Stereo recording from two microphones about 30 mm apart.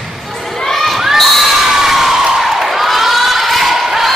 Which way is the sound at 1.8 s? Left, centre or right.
Centre.